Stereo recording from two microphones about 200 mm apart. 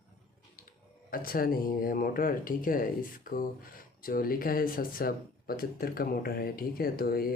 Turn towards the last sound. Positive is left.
turn(degrees=50)  # may be behind; listen again after turning